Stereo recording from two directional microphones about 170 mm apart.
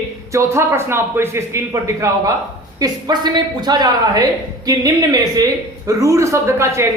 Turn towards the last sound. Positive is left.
turn(degrees=-15)  # may be behind; listen again after turning